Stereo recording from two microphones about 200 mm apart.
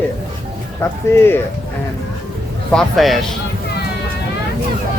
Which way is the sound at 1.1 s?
15° left (ahead or behind).